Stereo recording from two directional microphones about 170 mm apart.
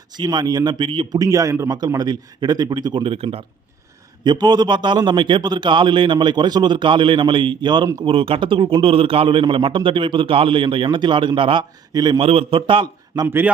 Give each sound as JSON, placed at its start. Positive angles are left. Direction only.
{"t": 0.2, "sound": "a man's voice", "side_deg": -25}
{"t": 8.0, "sound": "a man's voice", "side_deg": -30}
{"t": 13.2, "sound": "a man's voice", "side_deg": -10}